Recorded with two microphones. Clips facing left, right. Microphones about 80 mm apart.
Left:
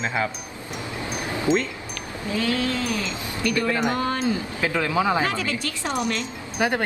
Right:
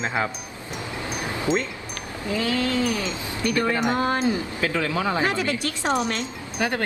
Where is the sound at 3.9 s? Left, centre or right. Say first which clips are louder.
Right 2 dB; right.